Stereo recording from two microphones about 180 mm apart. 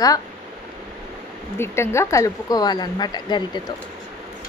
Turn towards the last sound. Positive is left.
turn(degrees=25)  # may be behind; listen again after turning